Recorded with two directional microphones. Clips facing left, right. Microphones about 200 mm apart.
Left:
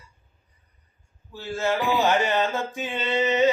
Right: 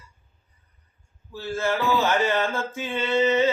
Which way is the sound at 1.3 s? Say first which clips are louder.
Even; 20° left (ahead or behind).